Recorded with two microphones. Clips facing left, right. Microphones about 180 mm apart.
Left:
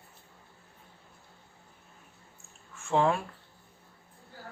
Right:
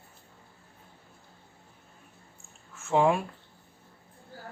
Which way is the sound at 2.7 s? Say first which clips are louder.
Right 2 dB; centre (ahead or behind).